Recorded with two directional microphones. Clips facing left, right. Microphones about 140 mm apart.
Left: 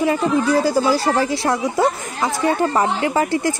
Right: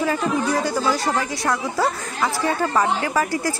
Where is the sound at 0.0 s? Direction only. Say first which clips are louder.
Left 4 dB; 25° left (ahead or behind).